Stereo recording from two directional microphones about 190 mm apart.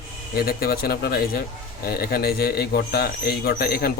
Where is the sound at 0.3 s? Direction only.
55° left (ahead or behind).